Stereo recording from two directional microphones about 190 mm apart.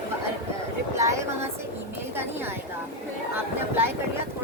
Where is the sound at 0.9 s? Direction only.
15° right (ahead or behind).